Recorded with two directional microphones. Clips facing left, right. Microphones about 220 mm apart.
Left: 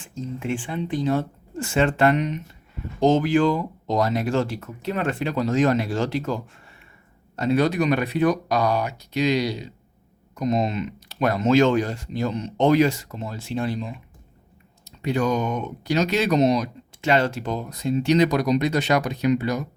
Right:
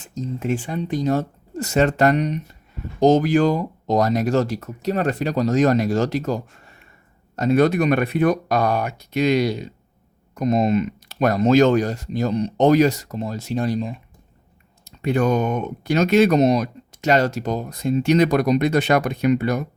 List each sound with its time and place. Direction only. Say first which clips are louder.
0.0 s speech: right 3 dB; 40° right (ahead or behind)
15.0 s speech: right 3 dB; 55° right (ahead or behind)